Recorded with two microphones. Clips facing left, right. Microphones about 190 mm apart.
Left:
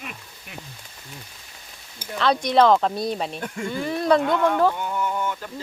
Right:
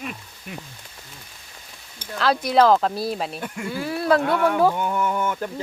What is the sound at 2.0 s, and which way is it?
Speech, centre (ahead or behind).